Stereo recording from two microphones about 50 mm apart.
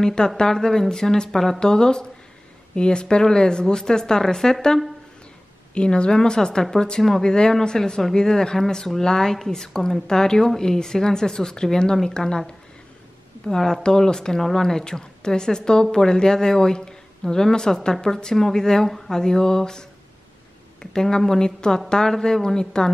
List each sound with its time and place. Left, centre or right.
0.0 s speech: centre
5.8 s speech: centre
13.5 s speech: centre